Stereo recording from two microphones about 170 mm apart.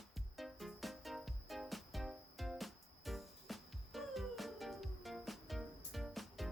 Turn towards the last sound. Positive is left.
turn(degrees=0)  # may be behind; listen again after turning